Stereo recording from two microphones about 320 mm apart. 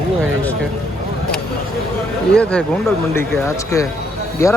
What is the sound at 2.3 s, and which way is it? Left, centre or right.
Speech, centre.